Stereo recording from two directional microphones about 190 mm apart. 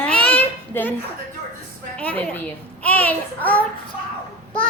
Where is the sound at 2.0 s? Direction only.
10° left (ahead or behind).